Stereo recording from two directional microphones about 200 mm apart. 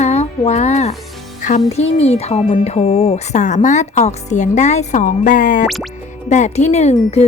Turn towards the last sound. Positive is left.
turn(degrees=30)  # may be behind; listen again after turning